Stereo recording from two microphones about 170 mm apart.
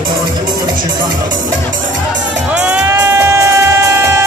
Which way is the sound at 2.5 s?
5° right (ahead or behind).